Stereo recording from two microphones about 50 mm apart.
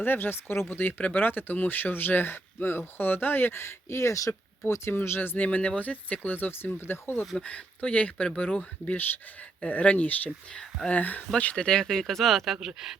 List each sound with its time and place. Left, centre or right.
0.0 s speech: left
4.9 s speech: left
5.5 s speech: left
7.3 s speech: left
11.5 s speech: centre